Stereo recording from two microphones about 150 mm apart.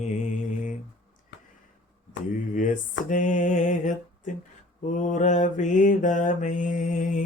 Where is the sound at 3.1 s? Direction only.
55° left (ahead or behind).